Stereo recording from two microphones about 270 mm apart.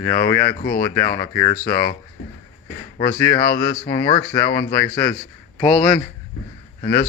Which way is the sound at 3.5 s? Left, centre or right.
Left.